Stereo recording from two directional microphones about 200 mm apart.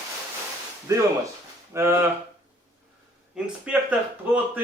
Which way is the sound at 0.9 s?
15° right (ahead or behind).